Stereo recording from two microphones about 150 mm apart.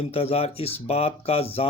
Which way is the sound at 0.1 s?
40° left (ahead or behind).